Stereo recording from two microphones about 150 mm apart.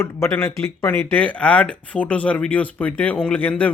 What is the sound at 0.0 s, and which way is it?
Speech, 15° left (ahead or behind).